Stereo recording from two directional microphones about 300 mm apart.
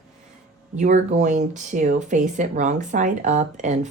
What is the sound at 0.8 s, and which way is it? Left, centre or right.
Speech, right.